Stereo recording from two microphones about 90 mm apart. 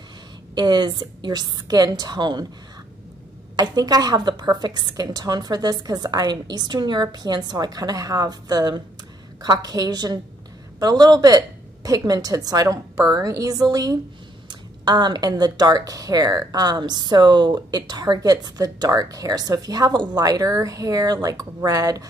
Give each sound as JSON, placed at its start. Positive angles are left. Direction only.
{"t": 0.6, "sound": "speech", "side_deg": -55}
{"t": 3.5, "sound": "speech", "side_deg": -50}